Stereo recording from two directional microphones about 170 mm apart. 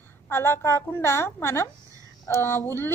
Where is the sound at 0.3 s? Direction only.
15° left (ahead or behind).